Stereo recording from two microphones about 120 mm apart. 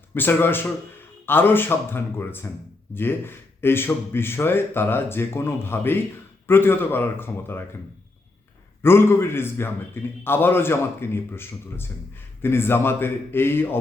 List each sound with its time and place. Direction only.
0.1 s a man's voice: 15° left (ahead or behind)
8.8 s a man's voice: 20° left (ahead or behind)